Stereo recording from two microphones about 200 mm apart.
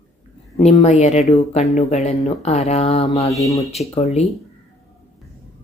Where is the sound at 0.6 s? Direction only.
30° left (ahead or behind).